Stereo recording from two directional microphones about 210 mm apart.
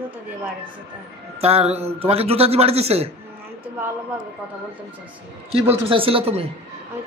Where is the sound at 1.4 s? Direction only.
30° right (ahead or behind).